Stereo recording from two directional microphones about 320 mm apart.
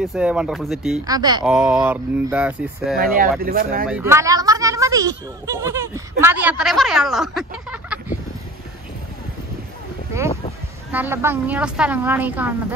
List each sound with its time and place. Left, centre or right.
0.0 s a woman's voice: centre
1.0 s a woman's voice: centre
3.2 s speech: right
3.8 s speech: centre
10.1 s a woman's voice: centre